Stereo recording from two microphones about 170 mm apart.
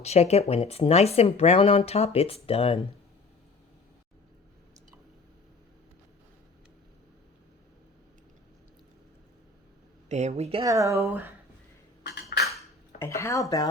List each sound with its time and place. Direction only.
0.0 s speech: 40° left (ahead or behind)
10.1 s a woman's voice: 40° right (ahead or behind)
10.6 s speech: 20° right (ahead or behind)
12.0 s a sound: 75° left (ahead or behind)
13.0 s speech: 15° left (ahead or behind)